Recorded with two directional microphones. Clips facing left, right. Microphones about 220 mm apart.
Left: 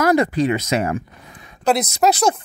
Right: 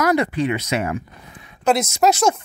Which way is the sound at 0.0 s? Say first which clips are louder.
Left 2 dB; 40° left (ahead or behind).